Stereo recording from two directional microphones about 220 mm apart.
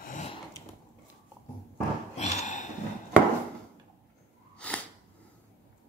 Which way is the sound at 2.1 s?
30° left (ahead or behind).